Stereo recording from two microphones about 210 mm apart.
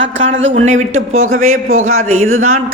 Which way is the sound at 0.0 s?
60° right (ahead or behind).